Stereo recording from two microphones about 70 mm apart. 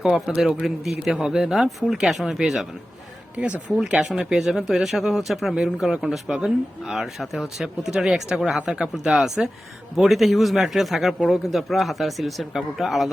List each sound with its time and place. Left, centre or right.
0.0 s speech: centre
3.3 s speech: centre